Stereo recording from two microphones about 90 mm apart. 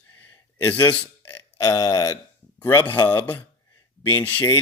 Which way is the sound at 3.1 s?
25° left (ahead or behind).